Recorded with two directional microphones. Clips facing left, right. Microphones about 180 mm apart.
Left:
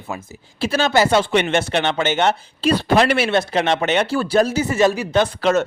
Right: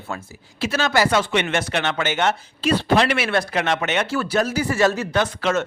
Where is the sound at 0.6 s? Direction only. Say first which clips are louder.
Left 3 dB; 30° left (ahead or behind).